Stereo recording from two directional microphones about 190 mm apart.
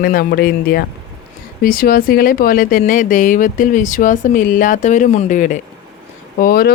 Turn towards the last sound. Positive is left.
turn(degrees=50)  # may be behind; listen again after turning